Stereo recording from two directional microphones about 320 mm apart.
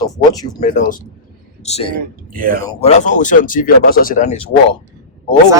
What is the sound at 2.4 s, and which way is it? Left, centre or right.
Speech, right.